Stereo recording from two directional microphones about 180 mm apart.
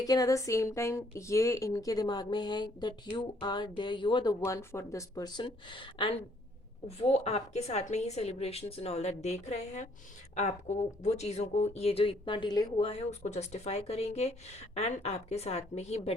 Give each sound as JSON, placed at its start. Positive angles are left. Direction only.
{"t": 0.0, "sound": "speech", "side_deg": 20}